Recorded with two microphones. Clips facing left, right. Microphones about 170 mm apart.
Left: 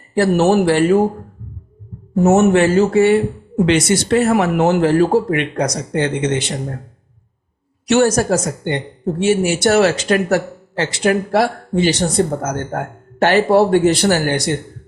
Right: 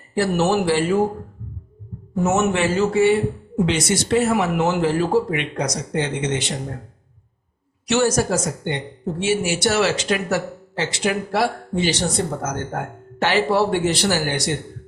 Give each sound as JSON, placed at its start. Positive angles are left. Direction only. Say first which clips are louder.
{"t": 0.2, "sound": "speech", "louder": "left 6 dB", "side_deg": 55}
{"t": 2.2, "sound": "speech", "louder": "left 7 dB", "side_deg": 50}
{"t": 3.7, "sound": "speech", "louder": "left 6 dB", "side_deg": 65}
{"t": 7.9, "sound": "speech", "louder": "left 5 dB", "side_deg": 55}